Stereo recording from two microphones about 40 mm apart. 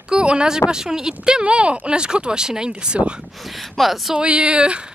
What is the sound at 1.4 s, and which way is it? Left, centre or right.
Speech, right.